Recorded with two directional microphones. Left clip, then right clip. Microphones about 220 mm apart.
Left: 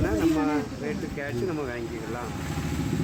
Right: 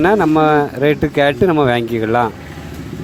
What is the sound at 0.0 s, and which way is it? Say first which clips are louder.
Speech: right 13 dB; 50° right (ahead or behind).